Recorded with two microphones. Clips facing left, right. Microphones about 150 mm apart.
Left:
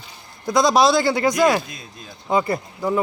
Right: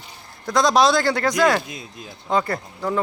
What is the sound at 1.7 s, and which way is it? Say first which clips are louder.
Speech: right 3 dB; 20° right (ahead or behind).